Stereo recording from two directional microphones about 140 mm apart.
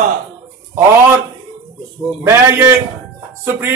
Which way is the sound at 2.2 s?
15° right (ahead or behind).